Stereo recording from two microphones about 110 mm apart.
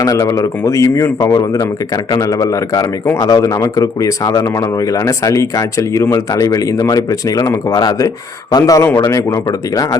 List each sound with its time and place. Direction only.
0.0 s a man's voice: 30° left (ahead or behind)